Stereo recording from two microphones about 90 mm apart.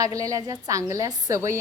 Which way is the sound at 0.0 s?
40° right (ahead or behind).